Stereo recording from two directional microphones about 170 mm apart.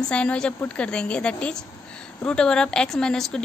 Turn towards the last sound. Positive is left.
turn(degrees=5)  # may be behind; listen again after turning